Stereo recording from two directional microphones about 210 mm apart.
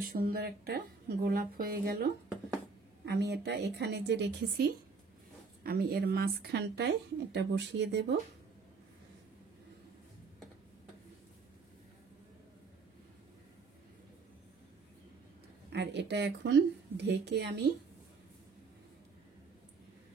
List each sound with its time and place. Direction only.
0.0 s speech: 45° right (ahead or behind)
15.7 s speech: 55° right (ahead or behind)